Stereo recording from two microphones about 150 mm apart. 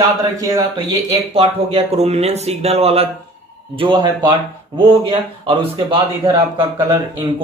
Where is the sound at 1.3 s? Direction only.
40° right (ahead or behind).